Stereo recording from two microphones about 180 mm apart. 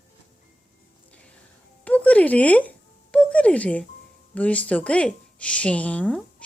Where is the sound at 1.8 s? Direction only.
10° left (ahead or behind).